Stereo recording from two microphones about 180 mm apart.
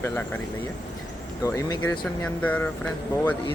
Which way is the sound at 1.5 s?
20° left (ahead or behind).